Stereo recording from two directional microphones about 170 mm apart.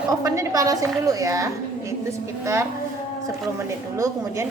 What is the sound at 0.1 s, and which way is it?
A woman's voice, 20° right (ahead or behind).